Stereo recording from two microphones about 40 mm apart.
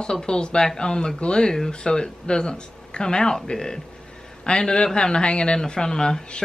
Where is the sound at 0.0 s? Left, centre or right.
Centre.